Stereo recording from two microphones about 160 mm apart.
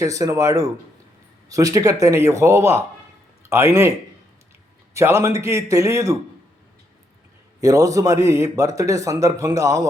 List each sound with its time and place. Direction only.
0.0 s a man's voice: 20° right (ahead or behind)
4.9 s a man's voice: 15° right (ahead or behind)
7.6 s a man's voice: 20° right (ahead or behind)